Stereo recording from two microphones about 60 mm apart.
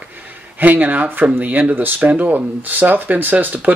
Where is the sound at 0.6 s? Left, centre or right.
Right.